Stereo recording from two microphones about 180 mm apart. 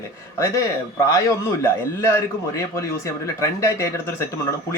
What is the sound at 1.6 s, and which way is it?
Speech, 15° left (ahead or behind).